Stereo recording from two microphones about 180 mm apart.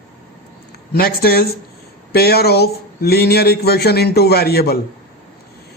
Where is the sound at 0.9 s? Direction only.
60° left (ahead or behind).